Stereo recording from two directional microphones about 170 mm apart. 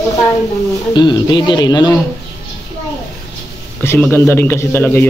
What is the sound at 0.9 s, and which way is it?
Speech, 25° left (ahead or behind).